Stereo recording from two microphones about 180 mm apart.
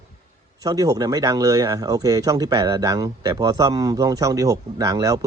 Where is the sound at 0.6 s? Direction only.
20° right (ahead or behind).